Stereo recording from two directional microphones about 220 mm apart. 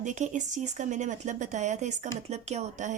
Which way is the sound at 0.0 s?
35° right (ahead or behind).